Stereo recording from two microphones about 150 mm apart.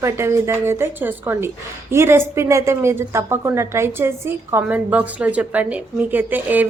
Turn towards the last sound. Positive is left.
turn(degrees=-10)  # may be behind; listen again after turning